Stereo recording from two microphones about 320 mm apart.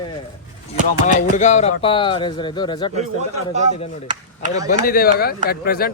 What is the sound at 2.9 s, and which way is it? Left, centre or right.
Speech, right.